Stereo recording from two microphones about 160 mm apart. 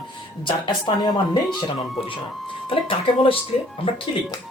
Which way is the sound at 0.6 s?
25° left (ahead or behind).